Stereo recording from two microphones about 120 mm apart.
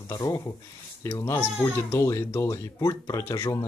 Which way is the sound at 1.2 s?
20° left (ahead or behind).